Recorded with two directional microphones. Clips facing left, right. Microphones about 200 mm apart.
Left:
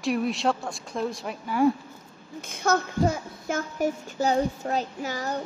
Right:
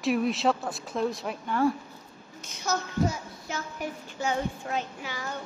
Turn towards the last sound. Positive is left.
turn(degrees=40)  # may be behind; listen again after turning